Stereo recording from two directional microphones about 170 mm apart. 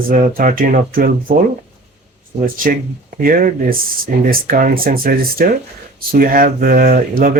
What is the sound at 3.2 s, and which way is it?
Speech, 55° right (ahead or behind).